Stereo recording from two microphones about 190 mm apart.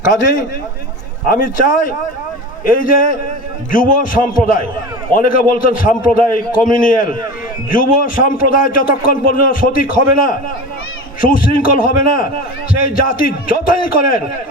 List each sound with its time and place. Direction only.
1.3 s a man's voice: 45° left (ahead or behind)